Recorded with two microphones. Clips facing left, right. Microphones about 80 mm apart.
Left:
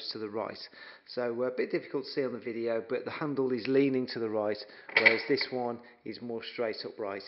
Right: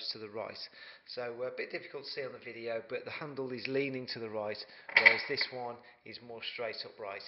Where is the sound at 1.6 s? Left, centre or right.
Left.